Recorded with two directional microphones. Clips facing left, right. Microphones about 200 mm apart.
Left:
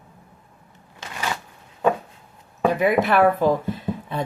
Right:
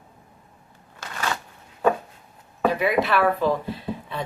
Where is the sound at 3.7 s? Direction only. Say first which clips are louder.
Left 3 dB; 45° left (ahead or behind).